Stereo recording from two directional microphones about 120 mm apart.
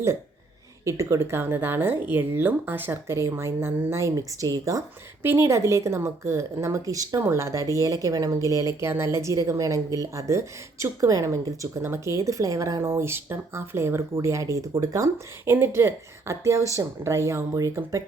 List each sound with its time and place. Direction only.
0.9 s speech: 25° right (ahead or behind)